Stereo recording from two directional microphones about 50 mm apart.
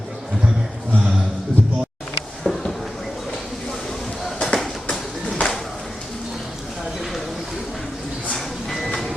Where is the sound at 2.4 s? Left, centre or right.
Centre.